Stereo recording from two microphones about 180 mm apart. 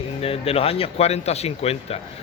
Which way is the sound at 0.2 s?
35° left (ahead or behind).